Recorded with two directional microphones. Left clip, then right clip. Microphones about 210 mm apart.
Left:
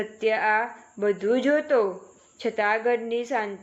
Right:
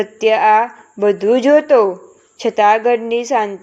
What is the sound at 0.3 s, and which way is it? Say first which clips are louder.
A woman's voice: right 11 dB; 30° right (ahead or behind).